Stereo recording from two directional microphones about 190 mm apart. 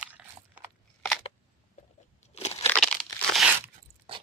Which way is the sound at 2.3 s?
35° left (ahead or behind).